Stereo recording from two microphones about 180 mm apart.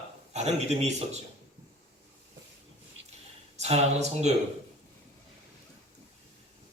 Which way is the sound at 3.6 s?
35° right (ahead or behind).